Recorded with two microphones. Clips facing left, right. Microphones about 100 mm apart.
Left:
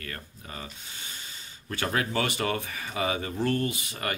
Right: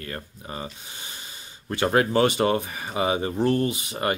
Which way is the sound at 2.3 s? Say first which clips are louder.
Right 7 dB; 25° right (ahead or behind).